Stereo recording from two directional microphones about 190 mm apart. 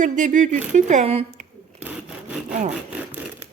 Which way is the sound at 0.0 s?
45° right (ahead or behind).